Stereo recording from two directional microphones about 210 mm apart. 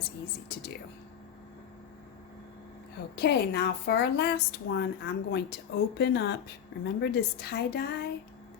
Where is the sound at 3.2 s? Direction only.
50° left (ahead or behind).